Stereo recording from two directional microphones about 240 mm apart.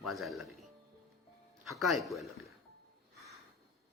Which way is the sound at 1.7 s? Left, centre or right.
Centre.